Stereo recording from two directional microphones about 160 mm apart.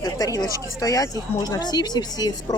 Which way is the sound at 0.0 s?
20° left (ahead or behind).